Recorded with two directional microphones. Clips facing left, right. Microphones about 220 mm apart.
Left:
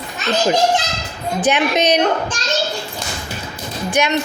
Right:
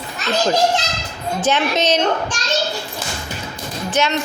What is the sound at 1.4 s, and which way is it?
Speech, 15° left (ahead or behind).